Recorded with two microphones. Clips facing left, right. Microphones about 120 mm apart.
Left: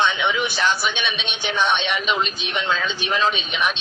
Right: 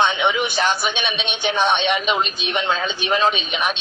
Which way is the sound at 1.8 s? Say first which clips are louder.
Right 3 dB; 15° right (ahead or behind).